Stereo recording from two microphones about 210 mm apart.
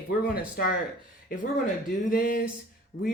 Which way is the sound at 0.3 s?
45° left (ahead or behind).